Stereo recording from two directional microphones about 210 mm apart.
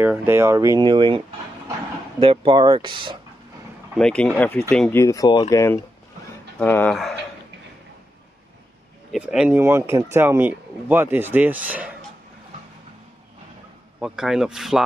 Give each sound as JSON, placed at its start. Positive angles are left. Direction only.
{"t": 0.0, "sound": "speech", "side_deg": -10}
{"t": 3.9, "sound": "speech", "side_deg": 5}
{"t": 9.1, "sound": "speech", "side_deg": -5}
{"t": 13.9, "sound": "speech", "side_deg": -5}